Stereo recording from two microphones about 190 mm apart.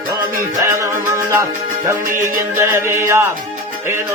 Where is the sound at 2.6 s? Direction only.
15° right (ahead or behind).